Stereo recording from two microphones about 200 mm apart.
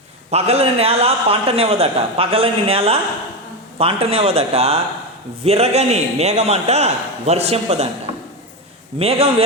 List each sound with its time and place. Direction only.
0.3 s a man's voice: 30° right (ahead or behind)
9.0 s a man's voice: 30° right (ahead or behind)